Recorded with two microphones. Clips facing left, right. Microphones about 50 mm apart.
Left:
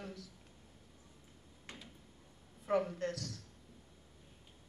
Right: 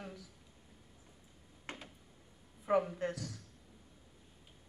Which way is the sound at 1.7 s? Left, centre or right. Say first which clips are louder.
Right 5 dB; right.